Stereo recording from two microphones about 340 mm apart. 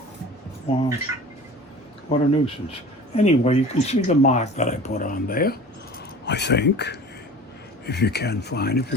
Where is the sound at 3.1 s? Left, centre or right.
Centre.